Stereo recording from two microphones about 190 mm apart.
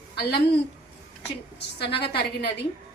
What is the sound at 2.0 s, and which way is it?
Speech, 60° left (ahead or behind).